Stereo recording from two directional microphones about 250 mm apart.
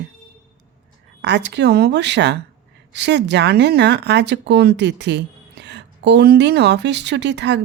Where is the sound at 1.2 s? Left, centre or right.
Right.